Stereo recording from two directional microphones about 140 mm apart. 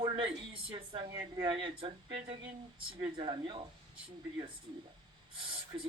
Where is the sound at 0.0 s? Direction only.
40° right (ahead or behind).